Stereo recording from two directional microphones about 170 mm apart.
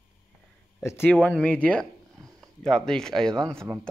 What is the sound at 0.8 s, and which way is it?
Speech, 10° left (ahead or behind).